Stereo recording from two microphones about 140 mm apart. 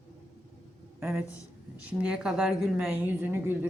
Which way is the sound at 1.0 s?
15° right (ahead or behind).